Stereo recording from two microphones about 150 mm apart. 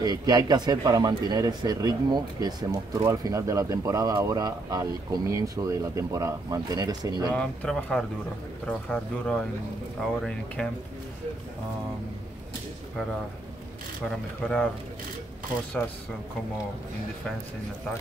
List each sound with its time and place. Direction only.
0.0 s speech: 25° right (ahead or behind)
7.3 s speech: 5° left (ahead or behind)
14.0 s speech: 5° left (ahead or behind)